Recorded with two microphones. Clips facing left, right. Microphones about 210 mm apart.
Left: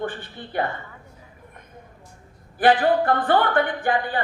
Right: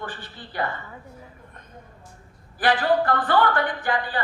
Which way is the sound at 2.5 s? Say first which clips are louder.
Left 3 dB; 25° left (ahead or behind).